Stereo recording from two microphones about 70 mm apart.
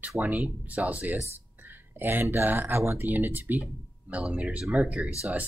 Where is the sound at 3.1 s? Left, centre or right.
Right.